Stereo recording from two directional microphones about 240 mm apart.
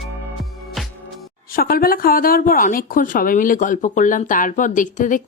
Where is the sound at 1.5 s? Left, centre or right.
Left.